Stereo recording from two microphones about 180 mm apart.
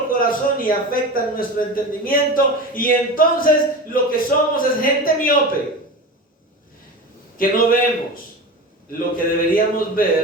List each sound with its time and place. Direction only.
0.1 s a man's voice: 50° left (ahead or behind)
7.3 s a man's voice: 50° left (ahead or behind)